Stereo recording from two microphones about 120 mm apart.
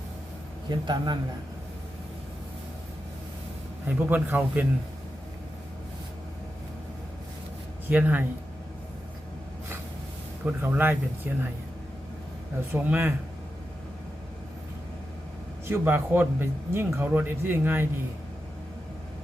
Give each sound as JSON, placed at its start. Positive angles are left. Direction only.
{"t": 0.7, "sound": "a man's voice", "side_deg": -35}
{"t": 3.8, "sound": "speech", "side_deg": -15}
{"t": 7.9, "sound": "speech", "side_deg": -15}
{"t": 10.4, "sound": "speech", "side_deg": -15}
{"t": 12.7, "sound": "speech", "side_deg": -15}
{"t": 15.6, "sound": "speech", "side_deg": -20}